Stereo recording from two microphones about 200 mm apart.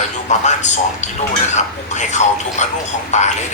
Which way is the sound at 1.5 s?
35° left (ahead or behind).